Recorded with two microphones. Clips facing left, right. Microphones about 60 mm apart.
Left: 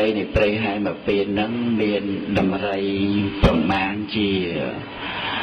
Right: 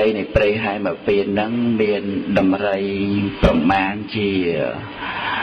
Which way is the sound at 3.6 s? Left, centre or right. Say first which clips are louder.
Right 4 dB; right.